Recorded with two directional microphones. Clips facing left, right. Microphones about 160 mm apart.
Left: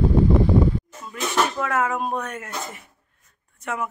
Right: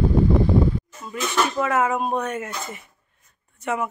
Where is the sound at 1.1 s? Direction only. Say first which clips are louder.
Even; 5° right (ahead or behind).